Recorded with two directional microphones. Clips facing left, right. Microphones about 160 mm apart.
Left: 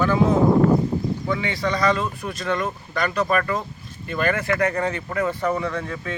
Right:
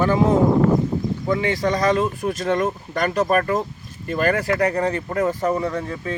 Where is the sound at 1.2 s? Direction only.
45° right (ahead or behind).